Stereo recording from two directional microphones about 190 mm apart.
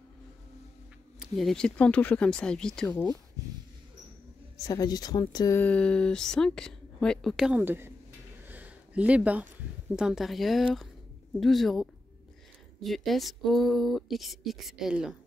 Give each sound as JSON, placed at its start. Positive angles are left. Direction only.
{"t": 1.2, "sound": "speech", "side_deg": 0}
{"t": 4.6, "sound": "speech", "side_deg": 20}
{"t": 5.6, "sound": "speech", "side_deg": 5}
{"t": 8.5, "sound": "a sound", "side_deg": -10}
{"t": 9.9, "sound": "speech", "side_deg": -5}